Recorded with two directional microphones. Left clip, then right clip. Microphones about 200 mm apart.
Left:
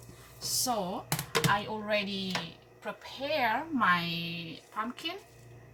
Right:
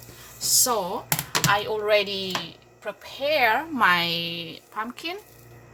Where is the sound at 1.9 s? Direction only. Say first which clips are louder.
Right 9 dB; 45° right (ahead or behind).